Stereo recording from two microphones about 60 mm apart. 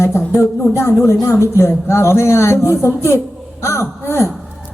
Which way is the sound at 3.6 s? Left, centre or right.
Left.